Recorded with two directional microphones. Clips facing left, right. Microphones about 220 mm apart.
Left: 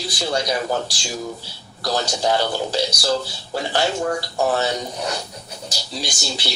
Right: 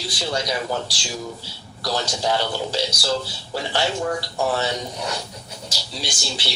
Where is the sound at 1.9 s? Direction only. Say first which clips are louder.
Left 3 dB; 45° left (ahead or behind).